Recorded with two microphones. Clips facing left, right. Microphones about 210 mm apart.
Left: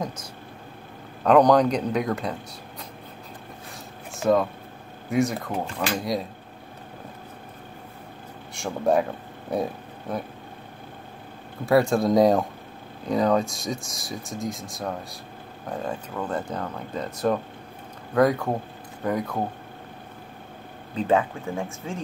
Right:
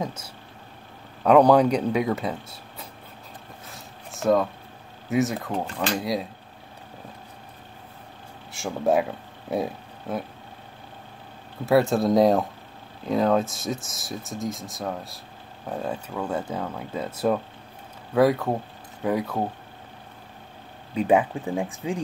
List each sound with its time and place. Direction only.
0.0 s a sound: 10° right (ahead or behind)
1.2 s speech: 10° right (ahead or behind)
3.7 s zipper: centre (ahead or behind)
5.1 s speech: centre (ahead or behind)
8.5 s speech: centre (ahead or behind)
11.6 s speech: centre (ahead or behind)
20.9 s speech: 15° right (ahead or behind)